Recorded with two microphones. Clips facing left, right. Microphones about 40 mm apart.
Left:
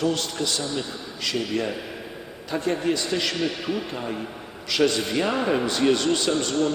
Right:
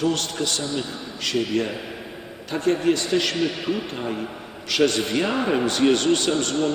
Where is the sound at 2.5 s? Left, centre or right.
Right.